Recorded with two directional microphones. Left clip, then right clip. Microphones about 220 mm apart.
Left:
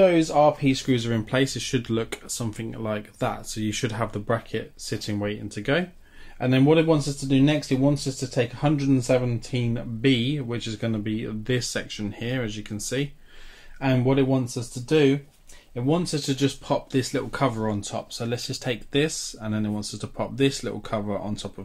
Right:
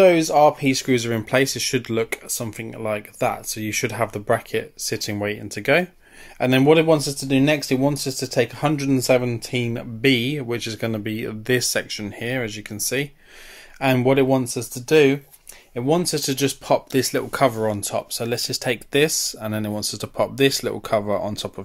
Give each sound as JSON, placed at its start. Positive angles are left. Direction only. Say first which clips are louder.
{"t": 0.0, "sound": "speech", "louder": "right 4 dB", "side_deg": -45}